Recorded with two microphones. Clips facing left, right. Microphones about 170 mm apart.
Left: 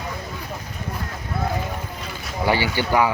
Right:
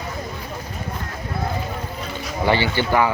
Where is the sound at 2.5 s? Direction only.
10° left (ahead or behind).